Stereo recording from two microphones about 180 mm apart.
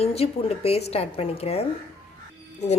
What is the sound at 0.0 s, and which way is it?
A woman's voice, 35° left (ahead or behind).